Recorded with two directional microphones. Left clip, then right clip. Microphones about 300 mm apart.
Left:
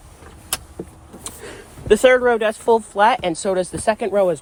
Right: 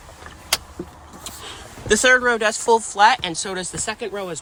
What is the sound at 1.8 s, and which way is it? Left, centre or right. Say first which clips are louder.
Speech: left 2 dB; centre.